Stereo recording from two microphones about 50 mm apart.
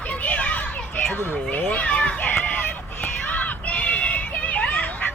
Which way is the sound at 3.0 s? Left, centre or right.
Left.